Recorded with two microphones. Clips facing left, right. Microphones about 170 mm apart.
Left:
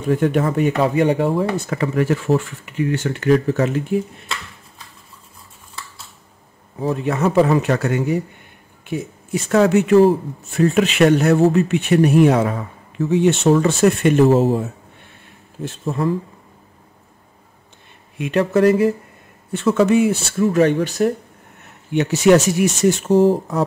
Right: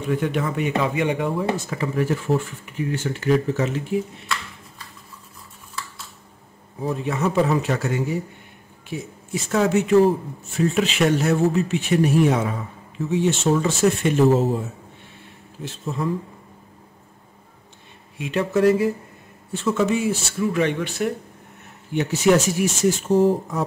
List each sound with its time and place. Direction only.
0.0 s speech: 45° left (ahead or behind)
1.7 s speech: 70° left (ahead or behind)
6.8 s speech: 60° left (ahead or behind)
15.6 s speech: 55° left (ahead or behind)
18.1 s speech: 60° left (ahead or behind)
20.4 s speech: 40° left (ahead or behind)
21.9 s speech: 75° left (ahead or behind)